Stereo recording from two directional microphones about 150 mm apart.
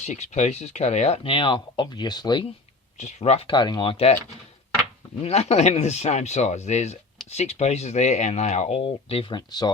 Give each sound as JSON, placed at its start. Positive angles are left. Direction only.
{"t": 0.0, "sound": "speech", "side_deg": 50}
{"t": 3.0, "sound": "speech", "side_deg": 50}
{"t": 5.2, "sound": "speech", "side_deg": 45}